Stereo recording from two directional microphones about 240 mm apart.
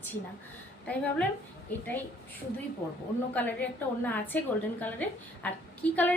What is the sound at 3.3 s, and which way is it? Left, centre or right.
A woman's voice, centre.